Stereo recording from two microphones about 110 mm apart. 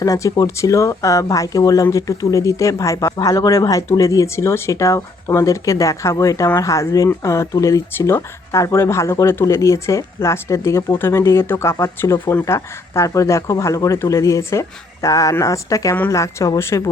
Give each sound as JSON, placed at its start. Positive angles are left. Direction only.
{"t": 0.0, "sound": "speech", "side_deg": 30}